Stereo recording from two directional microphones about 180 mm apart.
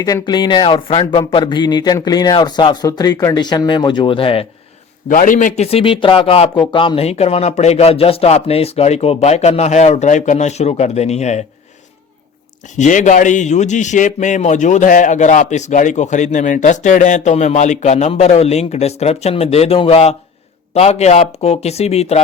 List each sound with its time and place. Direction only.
0.0 s speech: 20° left (ahead or behind)
5.0 s a man's voice: 45° left (ahead or behind)
5.6 s a man's voice: 30° left (ahead or behind)
12.6 s a man's voice: 40° left (ahead or behind)